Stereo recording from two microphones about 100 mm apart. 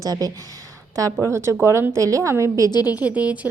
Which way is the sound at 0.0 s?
40° right (ahead or behind).